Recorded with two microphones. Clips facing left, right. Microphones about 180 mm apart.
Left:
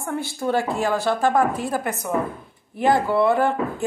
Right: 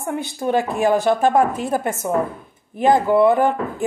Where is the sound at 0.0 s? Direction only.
20° right (ahead or behind).